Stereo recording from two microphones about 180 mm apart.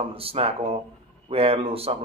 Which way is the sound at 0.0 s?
30° right (ahead or behind).